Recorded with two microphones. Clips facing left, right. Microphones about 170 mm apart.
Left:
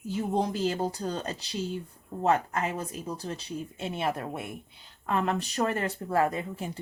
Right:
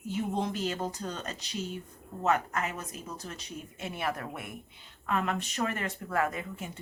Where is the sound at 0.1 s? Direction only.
35° left (ahead or behind).